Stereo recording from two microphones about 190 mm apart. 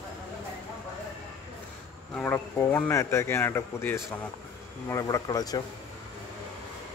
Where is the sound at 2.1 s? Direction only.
10° left (ahead or behind).